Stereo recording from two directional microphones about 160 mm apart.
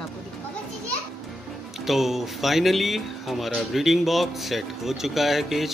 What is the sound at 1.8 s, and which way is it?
Speech, centre (ahead or behind).